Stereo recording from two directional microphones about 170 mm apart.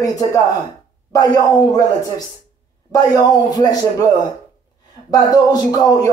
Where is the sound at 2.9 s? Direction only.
20° left (ahead or behind).